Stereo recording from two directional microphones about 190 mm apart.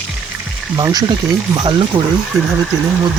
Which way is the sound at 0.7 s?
20° right (ahead or behind).